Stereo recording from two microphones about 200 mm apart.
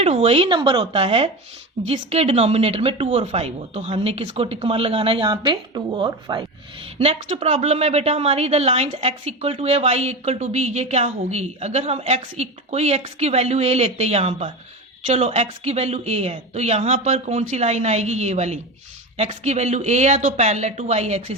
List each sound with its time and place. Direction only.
0.0 s a woman's voice: 30° right (ahead or behind)